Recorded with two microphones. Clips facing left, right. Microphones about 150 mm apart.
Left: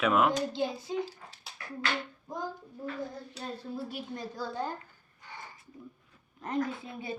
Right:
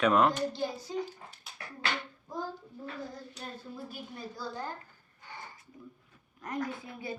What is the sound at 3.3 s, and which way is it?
Female singing, 35° left (ahead or behind).